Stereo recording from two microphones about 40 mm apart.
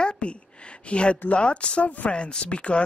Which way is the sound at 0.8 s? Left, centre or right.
Left.